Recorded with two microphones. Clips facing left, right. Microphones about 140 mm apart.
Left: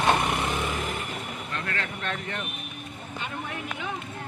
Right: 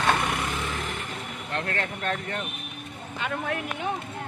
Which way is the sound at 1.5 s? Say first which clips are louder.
Right 4 dB; 40° right (ahead or behind).